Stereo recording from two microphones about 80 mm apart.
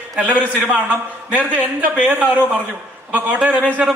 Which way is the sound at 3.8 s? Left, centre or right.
Centre.